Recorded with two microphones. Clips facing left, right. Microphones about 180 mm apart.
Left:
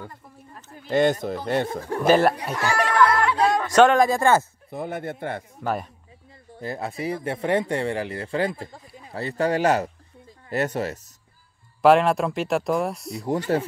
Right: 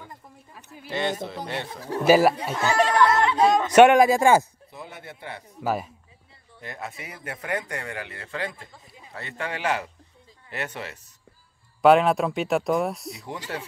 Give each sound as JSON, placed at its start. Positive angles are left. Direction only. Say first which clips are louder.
{"t": 0.7, "sound": "speech", "louder": "left 8 dB", "side_deg": 50}
{"t": 2.0, "sound": "speech", "louder": "even", "side_deg": -5}
{"t": 2.5, "sound": "speech", "louder": "right 1 dB", "side_deg": -25}
{"t": 4.6, "sound": "speech", "louder": "left 11 dB", "side_deg": 55}
{"t": 5.6, "sound": "speech", "louder": "right 1 dB", "side_deg": -5}
{"t": 6.6, "sound": "speech", "louder": "left 8 dB", "side_deg": 35}
{"t": 11.8, "sound": "speech", "louder": "even", "side_deg": 0}
{"t": 13.2, "sound": "speech", "louder": "left 14 dB", "side_deg": 45}